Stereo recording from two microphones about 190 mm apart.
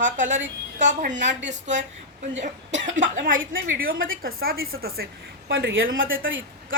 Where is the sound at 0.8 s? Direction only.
40° right (ahead or behind).